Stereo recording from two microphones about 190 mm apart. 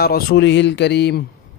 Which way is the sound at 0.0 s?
55° left (ahead or behind).